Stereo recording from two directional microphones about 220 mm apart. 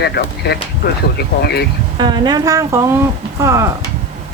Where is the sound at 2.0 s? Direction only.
20° right (ahead or behind).